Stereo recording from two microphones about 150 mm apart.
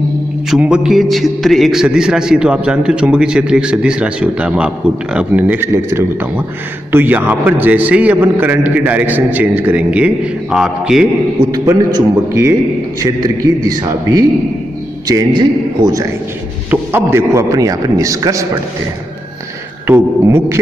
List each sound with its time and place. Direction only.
0.5 s a man's voice: 5° right (ahead or behind)
11.5 s a man's voice: 20° right (ahead or behind)
19.9 s a man's voice: 15° right (ahead or behind)